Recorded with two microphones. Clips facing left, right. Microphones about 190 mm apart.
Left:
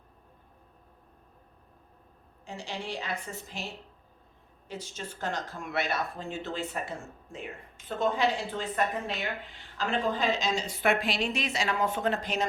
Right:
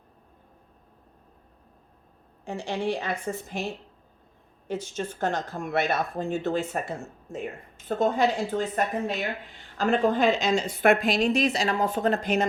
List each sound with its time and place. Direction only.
2.4 s a woman's voice: 55° right (ahead or behind)
4.7 s speech: 50° right (ahead or behind)